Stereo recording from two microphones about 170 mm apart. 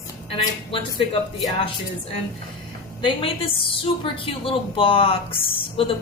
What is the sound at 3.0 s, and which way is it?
A woman's voice, 30° left (ahead or behind).